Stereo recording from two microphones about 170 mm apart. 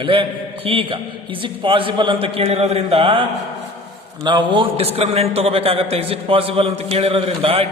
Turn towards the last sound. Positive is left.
turn(degrees=-35)  # may be behind; listen again after turning